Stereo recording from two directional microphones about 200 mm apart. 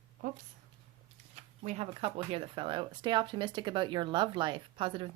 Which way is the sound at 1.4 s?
30° right (ahead or behind).